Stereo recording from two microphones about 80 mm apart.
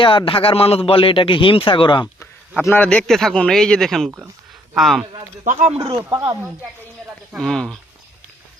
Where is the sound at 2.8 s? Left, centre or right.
Centre.